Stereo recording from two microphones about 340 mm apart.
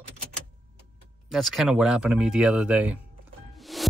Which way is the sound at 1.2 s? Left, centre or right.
Centre.